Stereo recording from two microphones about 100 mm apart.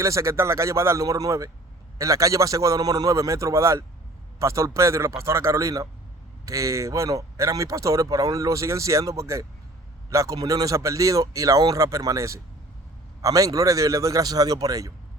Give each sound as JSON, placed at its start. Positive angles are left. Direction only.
{"t": 0.0, "sound": "speech", "side_deg": -30}